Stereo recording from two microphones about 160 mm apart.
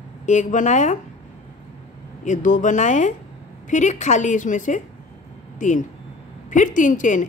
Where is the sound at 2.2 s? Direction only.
50° left (ahead or behind).